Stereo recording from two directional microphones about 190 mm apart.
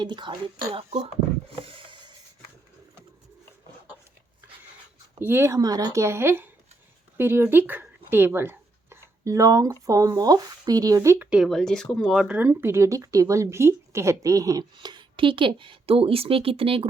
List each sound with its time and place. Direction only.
0.0 s speech: 25° right (ahead or behind)
1.6 s a sound: 30° right (ahead or behind)
5.2 s speech: 10° right (ahead or behind); by 16.8 s 30° right (ahead or behind)